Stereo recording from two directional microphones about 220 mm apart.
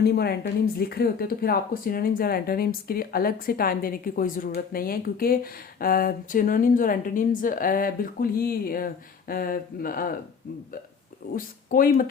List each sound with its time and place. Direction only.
0.0 s speech: 45° left (ahead or behind)
11.3 s speech: 40° left (ahead or behind)